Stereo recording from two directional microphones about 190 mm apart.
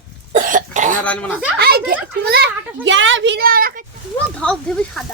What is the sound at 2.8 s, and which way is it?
Speech, 80° right.